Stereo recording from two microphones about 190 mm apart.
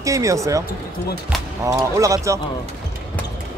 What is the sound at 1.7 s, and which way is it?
Speech, 15° right (ahead or behind).